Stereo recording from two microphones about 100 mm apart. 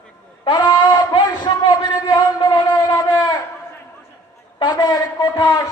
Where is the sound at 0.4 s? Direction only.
45° left (ahead or behind).